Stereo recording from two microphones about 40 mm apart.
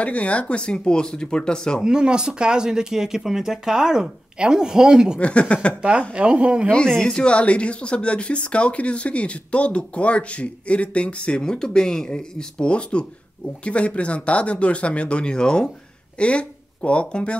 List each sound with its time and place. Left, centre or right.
0.0 s speech: left
1.8 s speech: centre
5.2 s speech: left
5.8 s speech: right
6.9 s speech: centre
7.2 s speech: left